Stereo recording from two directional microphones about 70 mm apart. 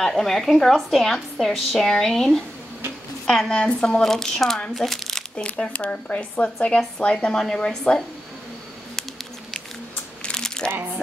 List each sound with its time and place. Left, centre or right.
0.0 s a woman's voice: centre
5.6 s speech: centre
10.2 s crumpling: centre